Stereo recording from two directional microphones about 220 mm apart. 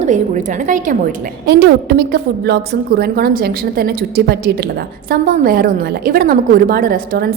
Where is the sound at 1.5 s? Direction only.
45° right (ahead or behind).